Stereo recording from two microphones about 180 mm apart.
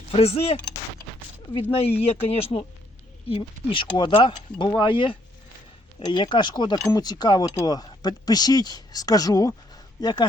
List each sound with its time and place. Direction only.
0.1 s speech: 35° left (ahead or behind)
1.7 s speech: 35° left (ahead or behind)